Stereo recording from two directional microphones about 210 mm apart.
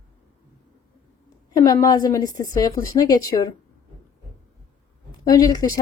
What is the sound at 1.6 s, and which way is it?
Speech, 20° left (ahead or behind).